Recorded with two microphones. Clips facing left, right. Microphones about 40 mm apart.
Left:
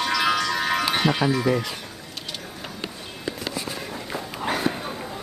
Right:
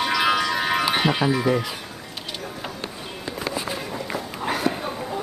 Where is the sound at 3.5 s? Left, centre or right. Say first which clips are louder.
Right 3 dB; centre.